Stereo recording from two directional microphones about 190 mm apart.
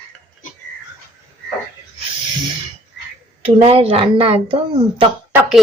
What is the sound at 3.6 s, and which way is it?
Speech, 30° right (ahead or behind).